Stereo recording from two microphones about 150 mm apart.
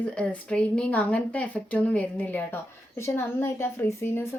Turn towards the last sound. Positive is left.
turn(degrees=15)  # may be behind; listen again after turning